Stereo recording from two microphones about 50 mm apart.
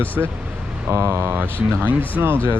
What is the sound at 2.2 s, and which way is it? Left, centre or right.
Speech, right.